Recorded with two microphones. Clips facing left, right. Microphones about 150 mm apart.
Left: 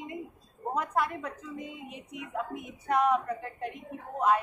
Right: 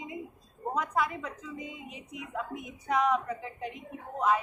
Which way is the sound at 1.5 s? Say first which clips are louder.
Left 1 dB; 55° left (ahead or behind).